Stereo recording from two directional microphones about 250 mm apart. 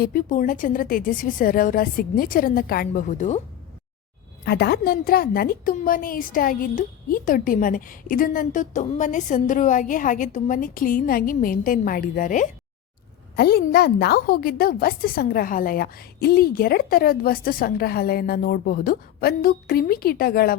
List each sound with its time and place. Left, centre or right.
0.0 s a woman's voice: left
4.4 s a woman's voice: left